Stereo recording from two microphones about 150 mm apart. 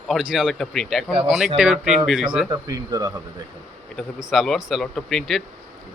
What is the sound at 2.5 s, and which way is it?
Speech, 25° right (ahead or behind).